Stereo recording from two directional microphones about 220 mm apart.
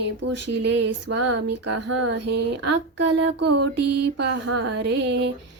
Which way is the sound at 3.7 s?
90° right.